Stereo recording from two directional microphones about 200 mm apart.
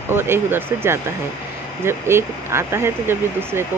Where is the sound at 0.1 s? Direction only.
10° right (ahead or behind).